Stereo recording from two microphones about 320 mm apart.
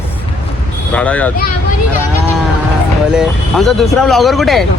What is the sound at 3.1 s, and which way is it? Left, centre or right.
Speech, centre.